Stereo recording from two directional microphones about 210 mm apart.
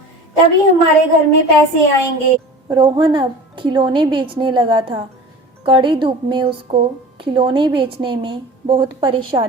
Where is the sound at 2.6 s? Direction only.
20° right (ahead or behind).